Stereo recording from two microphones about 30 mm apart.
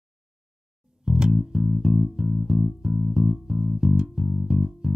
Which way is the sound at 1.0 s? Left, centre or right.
Right.